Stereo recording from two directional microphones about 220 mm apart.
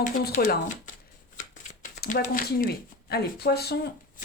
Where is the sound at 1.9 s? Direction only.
35° left (ahead or behind).